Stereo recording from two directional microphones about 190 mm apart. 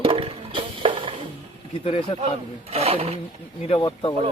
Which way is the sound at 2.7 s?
35° right (ahead or behind).